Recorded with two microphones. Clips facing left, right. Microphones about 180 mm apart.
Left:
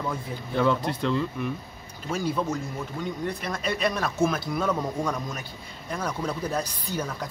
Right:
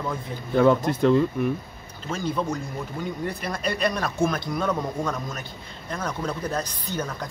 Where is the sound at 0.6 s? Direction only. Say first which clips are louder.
Right 6 dB; 50° right (ahead or behind).